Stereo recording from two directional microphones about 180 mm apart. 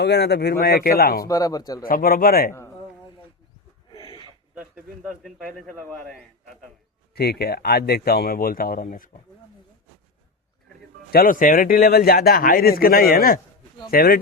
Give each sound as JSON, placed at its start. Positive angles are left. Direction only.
{"t": 0.0, "sound": "speech", "side_deg": 65}
{"t": 1.2, "sound": "speech", "side_deg": 20}
{"t": 1.8, "sound": "speech", "side_deg": 55}
{"t": 3.9, "sound": "battle cry", "side_deg": 30}
{"t": 5.5, "sound": "a man's voice", "side_deg": 0}
{"t": 7.1, "sound": "speech", "side_deg": 60}
{"t": 11.1, "sound": "speech", "side_deg": 50}